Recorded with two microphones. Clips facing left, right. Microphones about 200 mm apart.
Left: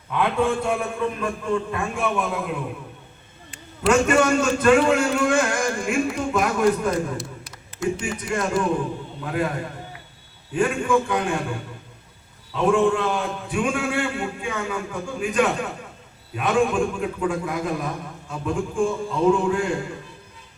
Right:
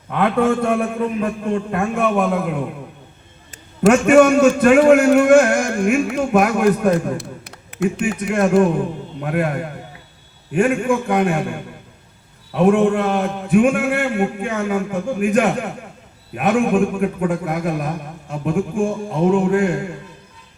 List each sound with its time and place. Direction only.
0.1 s a man's voice: 60° right (ahead or behind)
4.0 s a man's voice: 65° right (ahead or behind)
10.5 s a man's voice: 60° right (ahead or behind)
12.5 s a man's voice: 60° right (ahead or behind)